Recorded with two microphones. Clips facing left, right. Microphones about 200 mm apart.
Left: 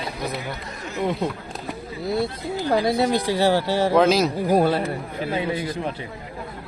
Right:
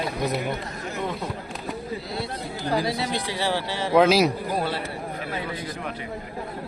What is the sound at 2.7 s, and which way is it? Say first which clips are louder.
Speech: left 5 dB; 45° left (ahead or behind).